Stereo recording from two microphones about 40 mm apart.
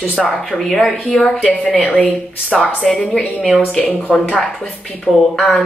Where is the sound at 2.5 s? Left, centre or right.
Left.